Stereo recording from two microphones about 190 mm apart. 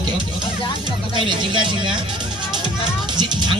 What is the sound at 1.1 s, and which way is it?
Speech, 25° right (ahead or behind).